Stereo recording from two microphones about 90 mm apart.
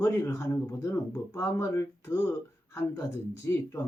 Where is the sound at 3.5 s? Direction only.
30° left (ahead or behind).